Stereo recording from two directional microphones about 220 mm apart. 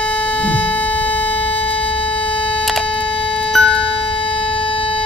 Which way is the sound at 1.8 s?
25° left (ahead or behind).